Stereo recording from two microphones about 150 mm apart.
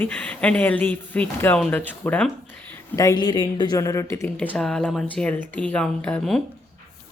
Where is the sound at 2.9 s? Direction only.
20° left (ahead or behind).